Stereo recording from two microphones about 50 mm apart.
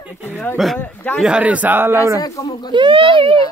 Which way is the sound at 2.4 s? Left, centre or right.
Left.